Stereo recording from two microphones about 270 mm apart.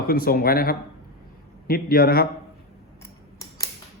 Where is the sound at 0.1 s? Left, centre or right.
Left.